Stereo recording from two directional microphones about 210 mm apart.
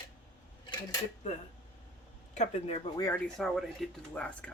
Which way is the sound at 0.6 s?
20° left (ahead or behind).